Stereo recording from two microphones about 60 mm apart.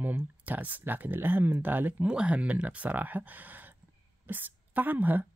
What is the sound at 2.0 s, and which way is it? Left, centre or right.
A woman's voice, centre.